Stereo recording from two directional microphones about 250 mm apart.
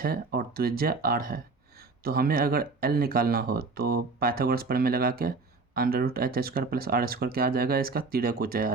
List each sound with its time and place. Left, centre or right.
0.0 s speech: right